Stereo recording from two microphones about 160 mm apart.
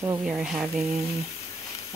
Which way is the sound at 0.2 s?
5° right (ahead or behind).